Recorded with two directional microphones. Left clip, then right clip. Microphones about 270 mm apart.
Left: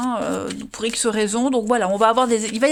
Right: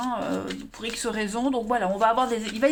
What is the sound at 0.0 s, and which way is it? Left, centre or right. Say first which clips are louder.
Speech: left 5 dB; left.